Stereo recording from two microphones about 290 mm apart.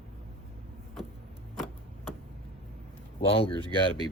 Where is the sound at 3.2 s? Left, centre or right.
Centre.